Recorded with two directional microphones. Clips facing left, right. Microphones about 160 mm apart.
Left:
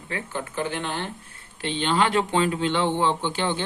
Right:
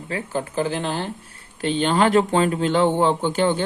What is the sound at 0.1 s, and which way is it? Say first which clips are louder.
Speech: right 5 dB; 35° right (ahead or behind).